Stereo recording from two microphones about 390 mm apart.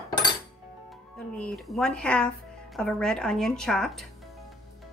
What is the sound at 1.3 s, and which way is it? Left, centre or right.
Speech, centre.